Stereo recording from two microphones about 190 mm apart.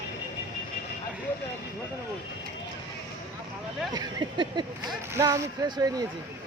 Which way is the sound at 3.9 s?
20° right (ahead or behind).